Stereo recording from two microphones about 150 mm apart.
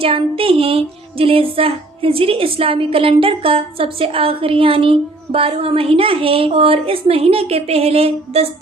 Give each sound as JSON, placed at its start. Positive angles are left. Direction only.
{"t": 0.0, "sound": "music", "side_deg": -35}